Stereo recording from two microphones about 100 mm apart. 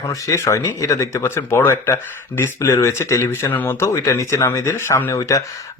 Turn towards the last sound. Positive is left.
turn(degrees=35)  # may be behind; listen again after turning